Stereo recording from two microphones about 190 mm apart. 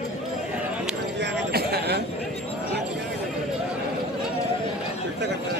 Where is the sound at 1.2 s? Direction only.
60° right (ahead or behind).